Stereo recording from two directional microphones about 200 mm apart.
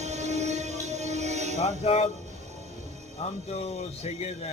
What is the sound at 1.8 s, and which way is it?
Speech, 30° left (ahead or behind).